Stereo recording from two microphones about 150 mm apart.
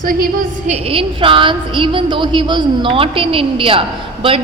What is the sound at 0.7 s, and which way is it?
A woman's voice, 40° right (ahead or behind).